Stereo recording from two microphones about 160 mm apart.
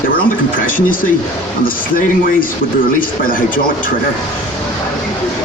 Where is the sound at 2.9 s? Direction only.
60° left (ahead or behind).